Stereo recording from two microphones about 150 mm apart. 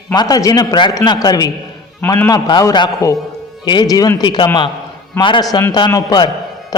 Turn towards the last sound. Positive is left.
turn(degrees=25)  # may be behind; listen again after turning